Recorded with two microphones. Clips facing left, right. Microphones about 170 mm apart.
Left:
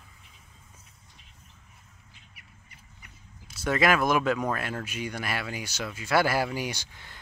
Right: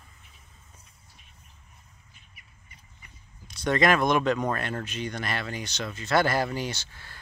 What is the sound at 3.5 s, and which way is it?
Speech, 5° left (ahead or behind).